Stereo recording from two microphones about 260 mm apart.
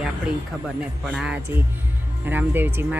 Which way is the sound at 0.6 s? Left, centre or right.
Centre.